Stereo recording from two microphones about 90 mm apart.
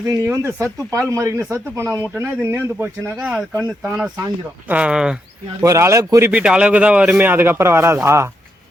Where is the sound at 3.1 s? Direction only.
5° right (ahead or behind).